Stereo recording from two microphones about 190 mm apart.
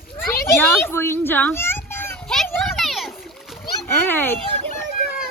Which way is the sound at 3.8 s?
10° left (ahead or behind).